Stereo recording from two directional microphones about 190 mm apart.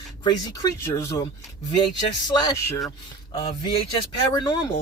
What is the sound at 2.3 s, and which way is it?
Speech, 20° left (ahead or behind).